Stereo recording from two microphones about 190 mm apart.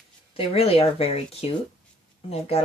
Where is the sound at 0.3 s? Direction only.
30° left (ahead or behind).